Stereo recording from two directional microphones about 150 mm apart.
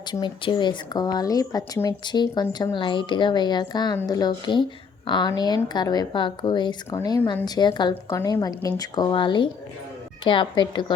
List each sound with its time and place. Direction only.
0.1 s a woman's voice: 30° left (ahead or behind)